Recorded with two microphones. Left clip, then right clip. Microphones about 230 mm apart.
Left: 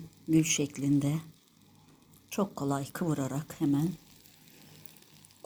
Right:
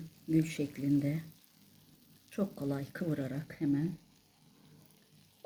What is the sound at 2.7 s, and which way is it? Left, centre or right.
Speech, left.